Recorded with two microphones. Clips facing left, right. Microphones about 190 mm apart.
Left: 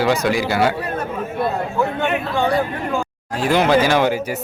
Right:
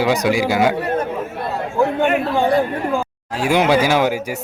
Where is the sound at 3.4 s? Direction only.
10° right (ahead or behind).